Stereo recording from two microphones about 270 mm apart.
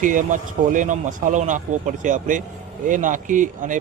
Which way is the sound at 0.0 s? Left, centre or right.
Right.